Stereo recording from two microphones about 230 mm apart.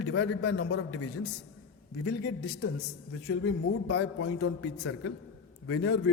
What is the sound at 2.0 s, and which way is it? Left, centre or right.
Speech, left.